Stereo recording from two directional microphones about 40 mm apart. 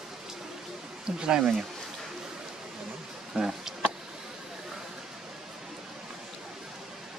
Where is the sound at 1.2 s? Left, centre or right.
Right.